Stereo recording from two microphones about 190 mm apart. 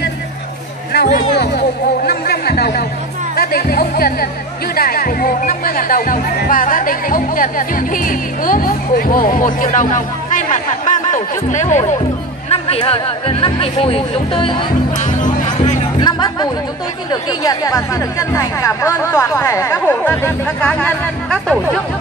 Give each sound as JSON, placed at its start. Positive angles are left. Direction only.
{"t": 1.0, "sound": "a sound", "side_deg": 55}
{"t": 2.0, "sound": "chatter", "side_deg": 55}
{"t": 3.3, "sound": "speech", "side_deg": 55}
{"t": 15.0, "sound": "music", "side_deg": 40}
{"t": 16.0, "sound": "music", "side_deg": 25}
{"t": 17.1, "sound": "speech", "side_deg": 20}